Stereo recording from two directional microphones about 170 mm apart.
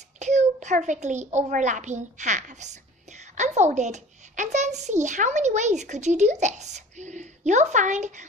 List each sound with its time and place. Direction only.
0.2 s a child's voice: 45° right (ahead or behind)